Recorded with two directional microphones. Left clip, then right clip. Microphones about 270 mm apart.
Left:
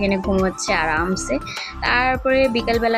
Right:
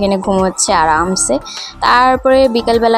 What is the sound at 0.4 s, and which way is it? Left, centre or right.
Speech, centre.